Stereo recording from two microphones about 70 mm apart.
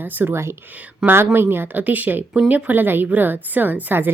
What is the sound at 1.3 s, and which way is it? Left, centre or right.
Speech, right.